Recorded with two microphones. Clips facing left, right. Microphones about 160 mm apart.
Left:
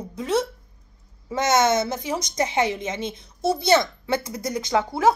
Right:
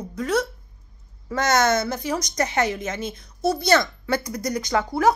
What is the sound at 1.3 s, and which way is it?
A woman's voice, 25° left (ahead or behind).